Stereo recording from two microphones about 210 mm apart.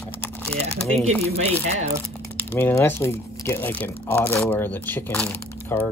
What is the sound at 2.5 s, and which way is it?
Speech, 10° left (ahead or behind).